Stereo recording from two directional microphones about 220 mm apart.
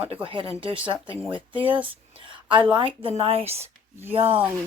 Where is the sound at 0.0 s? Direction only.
25° right (ahead or behind).